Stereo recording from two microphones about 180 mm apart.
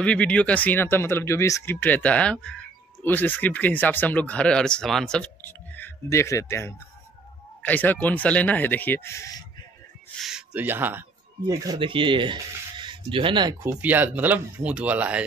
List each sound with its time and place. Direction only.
0.0 s speech: 5° left (ahead or behind)
10.2 s speech: 5° right (ahead or behind)
11.4 s speech: 20° right (ahead or behind)
13.6 s speech: 10° right (ahead or behind)